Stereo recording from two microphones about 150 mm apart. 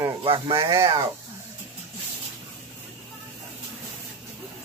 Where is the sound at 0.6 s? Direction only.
20° right (ahead or behind).